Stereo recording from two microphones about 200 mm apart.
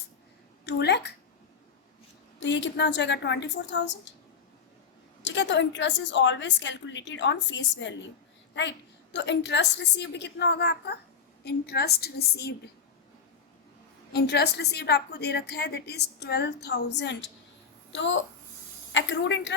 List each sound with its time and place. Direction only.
0.6 s a woman's voice: 55° left (ahead or behind)
2.4 s a woman's voice: 65° left (ahead or behind)
5.2 s a woman's voice: 65° left (ahead or behind)
9.1 s a woman's voice: 60° left (ahead or behind)
14.1 s a woman's voice: 55° left (ahead or behind)